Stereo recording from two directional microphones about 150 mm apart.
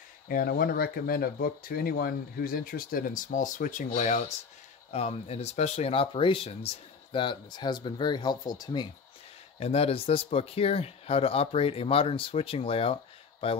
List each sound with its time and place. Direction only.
0.3 s speech: 75° left (ahead or behind); by 8.8 s 30° left (ahead or behind)
9.6 s speech: 40° left (ahead or behind)